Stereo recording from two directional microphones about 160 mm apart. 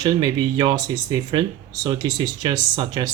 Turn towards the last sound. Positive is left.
turn(degrees=-25)  # may be behind; listen again after turning